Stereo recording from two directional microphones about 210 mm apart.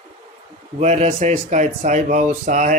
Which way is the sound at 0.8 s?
30° right (ahead or behind).